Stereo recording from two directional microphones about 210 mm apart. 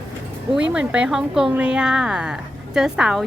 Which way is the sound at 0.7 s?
5° right (ahead or behind).